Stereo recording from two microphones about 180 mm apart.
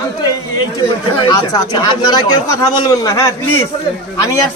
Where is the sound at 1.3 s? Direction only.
25° left (ahead or behind).